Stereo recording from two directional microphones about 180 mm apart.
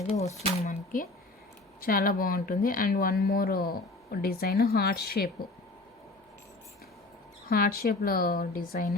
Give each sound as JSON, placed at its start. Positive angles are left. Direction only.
{"t": 0.6, "sound": "a sound", "side_deg": 45}
{"t": 1.8, "sound": "speech", "side_deg": 55}
{"t": 7.5, "sound": "speech", "side_deg": 55}